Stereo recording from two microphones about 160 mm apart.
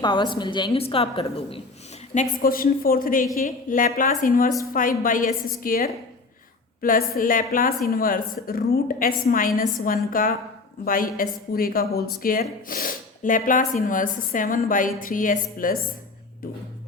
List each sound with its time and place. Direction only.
0.0 s a woman's voice: 30° left (ahead or behind)
2.1 s a woman's voice: 65° left (ahead or behind)